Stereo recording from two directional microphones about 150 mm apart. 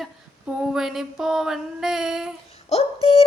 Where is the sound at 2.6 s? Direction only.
40° left (ahead or behind).